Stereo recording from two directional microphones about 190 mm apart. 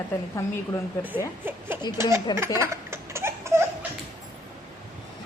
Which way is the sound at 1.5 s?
10° right (ahead or behind).